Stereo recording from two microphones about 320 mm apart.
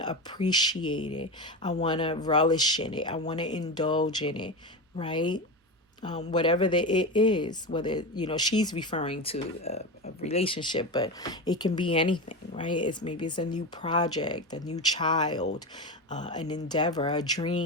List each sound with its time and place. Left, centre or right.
0.0 s speech: centre
0.8 s speech: left
1.2 s speech: centre